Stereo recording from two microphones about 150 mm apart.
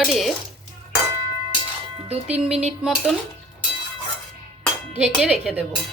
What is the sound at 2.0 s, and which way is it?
Speech, 45° right (ahead or behind).